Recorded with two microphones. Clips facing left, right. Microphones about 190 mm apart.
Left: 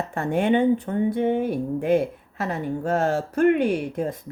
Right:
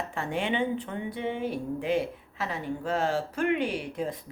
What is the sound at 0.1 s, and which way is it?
Speech, 45° left (ahead or behind).